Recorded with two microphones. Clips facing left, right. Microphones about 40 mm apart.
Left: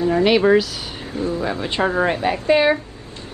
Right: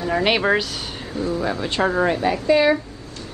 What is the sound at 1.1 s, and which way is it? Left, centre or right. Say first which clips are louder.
Speech: left 1 dB; left.